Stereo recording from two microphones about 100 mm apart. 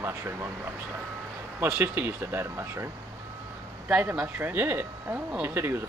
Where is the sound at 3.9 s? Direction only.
10° right (ahead or behind).